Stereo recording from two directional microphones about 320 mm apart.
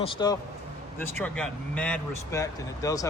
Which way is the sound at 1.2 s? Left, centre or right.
Centre.